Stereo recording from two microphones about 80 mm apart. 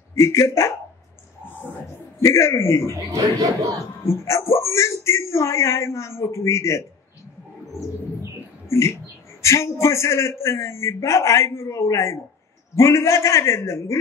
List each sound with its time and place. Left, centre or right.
0.1 s a man's voice: left
2.2 s a man's voice: left
2.9 s speech: right
4.0 s a man's voice: left
8.6 s a man's voice: left